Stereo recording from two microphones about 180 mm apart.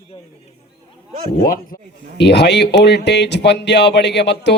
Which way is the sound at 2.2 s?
70° left (ahead or behind).